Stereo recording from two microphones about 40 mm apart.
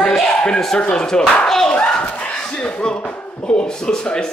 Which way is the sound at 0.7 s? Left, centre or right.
Left.